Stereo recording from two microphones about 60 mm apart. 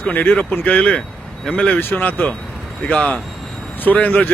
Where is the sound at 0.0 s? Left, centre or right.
Left.